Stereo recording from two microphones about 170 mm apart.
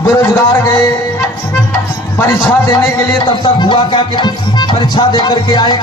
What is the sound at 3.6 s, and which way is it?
Music, 30° left (ahead or behind).